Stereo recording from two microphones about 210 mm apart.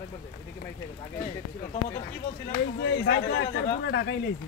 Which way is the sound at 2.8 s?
55° left (ahead or behind).